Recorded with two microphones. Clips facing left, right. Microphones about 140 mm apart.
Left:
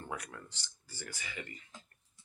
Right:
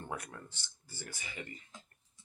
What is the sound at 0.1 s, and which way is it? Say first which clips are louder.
Speech: even; 30° right (ahead or behind).